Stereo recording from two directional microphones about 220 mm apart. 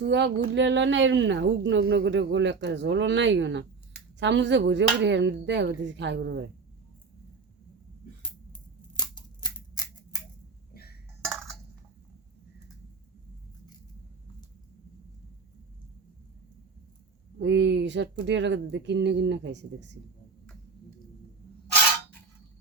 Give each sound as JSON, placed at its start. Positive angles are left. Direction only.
{"t": 0.1, "sound": "speech", "side_deg": -55}
{"t": 9.0, "sound": "scissors", "side_deg": 20}
{"t": 17.4, "sound": "speech", "side_deg": -50}